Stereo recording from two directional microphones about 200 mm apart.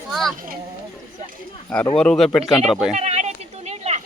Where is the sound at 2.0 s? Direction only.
5° left (ahead or behind).